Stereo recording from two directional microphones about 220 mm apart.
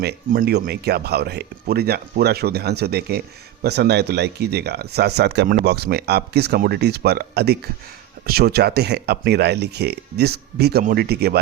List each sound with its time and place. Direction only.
0.0 s speech: 45° right (ahead or behind)